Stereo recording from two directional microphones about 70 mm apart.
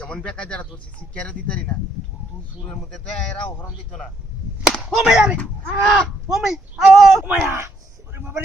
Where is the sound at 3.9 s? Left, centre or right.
Centre.